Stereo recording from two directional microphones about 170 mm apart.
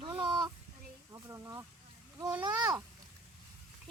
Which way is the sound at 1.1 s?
15° right (ahead or behind).